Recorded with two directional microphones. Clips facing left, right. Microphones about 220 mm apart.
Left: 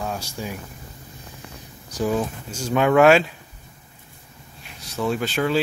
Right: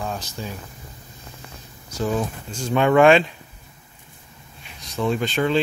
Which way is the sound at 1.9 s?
15° left (ahead or behind).